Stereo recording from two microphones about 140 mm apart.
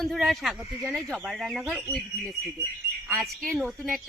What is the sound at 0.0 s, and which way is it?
A woman's voice, centre (ahead or behind).